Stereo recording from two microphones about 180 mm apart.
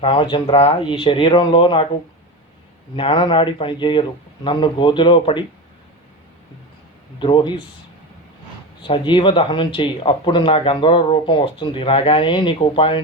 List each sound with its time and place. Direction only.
0.0 s speech: 30° left (ahead or behind)
7.2 s speech: 25° left (ahead or behind)
8.8 s speech: 25° left (ahead or behind)